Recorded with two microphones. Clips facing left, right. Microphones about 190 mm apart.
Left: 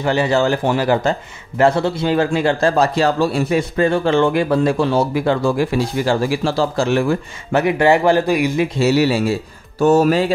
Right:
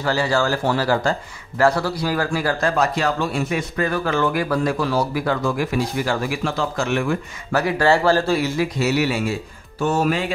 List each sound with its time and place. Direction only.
0.0 s a man's voice: 20° left (ahead or behind)
7.6 s speech: 15° left (ahead or behind)
8.7 s speech: 30° left (ahead or behind)